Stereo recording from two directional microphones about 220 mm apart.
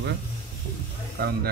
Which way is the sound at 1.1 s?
50° right (ahead or behind).